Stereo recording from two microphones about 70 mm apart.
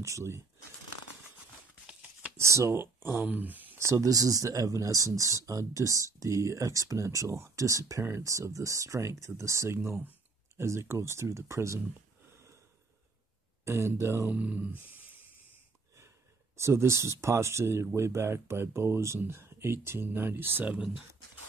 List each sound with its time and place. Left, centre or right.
0.0 s speech: right
1.9 s a sound: centre
2.3 s speech: right
3.7 s speech: right
13.7 s speech: right
14.3 s speech: right
16.5 s speech: right